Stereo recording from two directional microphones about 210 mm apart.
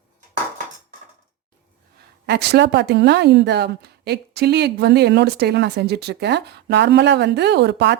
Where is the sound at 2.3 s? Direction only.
50° right (ahead or behind).